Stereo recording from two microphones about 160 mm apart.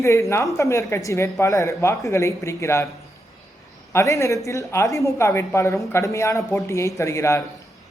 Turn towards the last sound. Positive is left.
turn(degrees=20)  # may be behind; listen again after turning